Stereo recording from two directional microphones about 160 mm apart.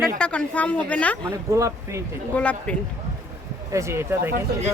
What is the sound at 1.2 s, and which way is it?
Speech, 15° right (ahead or behind).